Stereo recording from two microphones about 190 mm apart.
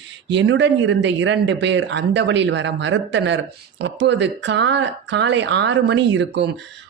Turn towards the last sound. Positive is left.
turn(degrees=-65)  # may be behind; listen again after turning